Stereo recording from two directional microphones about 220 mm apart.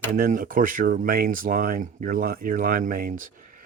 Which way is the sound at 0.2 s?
40° right (ahead or behind).